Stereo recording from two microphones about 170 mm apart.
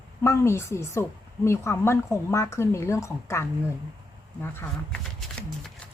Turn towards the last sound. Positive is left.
turn(degrees=15)  # may be behind; listen again after turning